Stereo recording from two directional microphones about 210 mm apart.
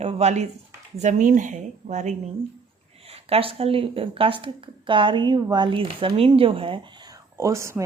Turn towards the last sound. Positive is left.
turn(degrees=-15)  # may be behind; listen again after turning